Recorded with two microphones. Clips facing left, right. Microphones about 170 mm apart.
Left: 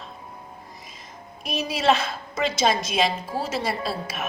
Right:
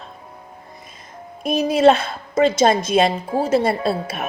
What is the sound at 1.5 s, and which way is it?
A woman's voice, 50° right (ahead or behind).